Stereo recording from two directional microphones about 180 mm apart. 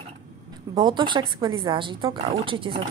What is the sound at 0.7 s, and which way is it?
Speech, 25° right (ahead or behind).